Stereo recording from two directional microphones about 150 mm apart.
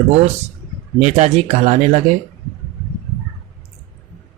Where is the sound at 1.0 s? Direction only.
50° right (ahead or behind).